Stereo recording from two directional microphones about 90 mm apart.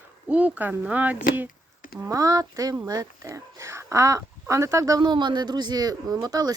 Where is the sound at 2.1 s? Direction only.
40° right (ahead or behind).